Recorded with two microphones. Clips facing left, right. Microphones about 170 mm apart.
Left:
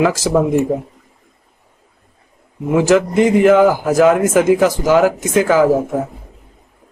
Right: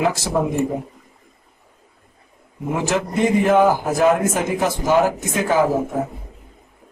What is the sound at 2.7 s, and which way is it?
Speech, 90° left.